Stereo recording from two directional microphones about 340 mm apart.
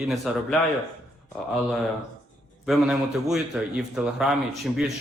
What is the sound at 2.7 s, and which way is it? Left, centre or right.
Speech, centre.